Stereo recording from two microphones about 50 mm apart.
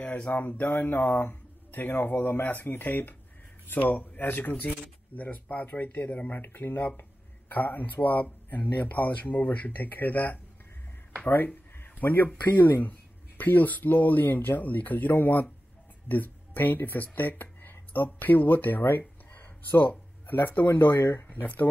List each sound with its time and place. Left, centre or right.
0.0 s a sound: left
0.3 s speech: left
6.4 s speech: left
20.9 s speech: left
21.3 s speech: left